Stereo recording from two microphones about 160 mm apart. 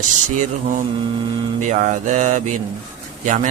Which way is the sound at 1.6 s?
50° right (ahead or behind).